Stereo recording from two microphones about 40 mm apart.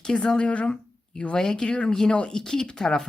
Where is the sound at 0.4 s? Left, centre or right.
Left.